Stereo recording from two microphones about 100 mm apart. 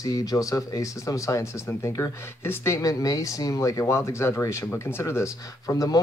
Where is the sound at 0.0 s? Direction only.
35° left (ahead or behind).